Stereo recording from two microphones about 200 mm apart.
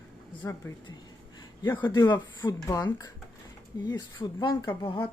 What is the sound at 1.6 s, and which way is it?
Speech, 20° left (ahead or behind).